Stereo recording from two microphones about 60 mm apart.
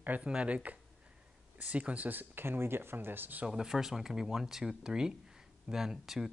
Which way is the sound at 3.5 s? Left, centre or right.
Centre.